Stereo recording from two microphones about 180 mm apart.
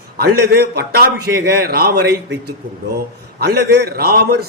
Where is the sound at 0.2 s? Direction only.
65° right (ahead or behind).